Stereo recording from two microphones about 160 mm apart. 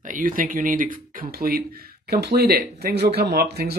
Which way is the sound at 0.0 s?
55° right (ahead or behind).